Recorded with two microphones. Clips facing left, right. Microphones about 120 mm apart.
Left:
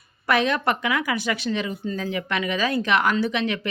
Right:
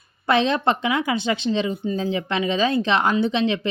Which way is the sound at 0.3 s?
25° right (ahead or behind).